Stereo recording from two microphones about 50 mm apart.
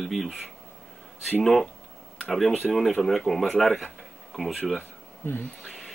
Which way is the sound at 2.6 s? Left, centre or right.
Centre.